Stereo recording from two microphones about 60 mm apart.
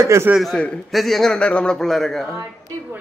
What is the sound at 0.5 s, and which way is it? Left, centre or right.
Speech, centre.